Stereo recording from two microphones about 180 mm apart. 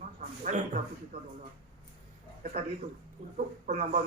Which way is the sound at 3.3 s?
40° right (ahead or behind).